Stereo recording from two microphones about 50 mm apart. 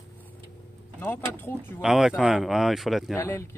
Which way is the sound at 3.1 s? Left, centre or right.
Left.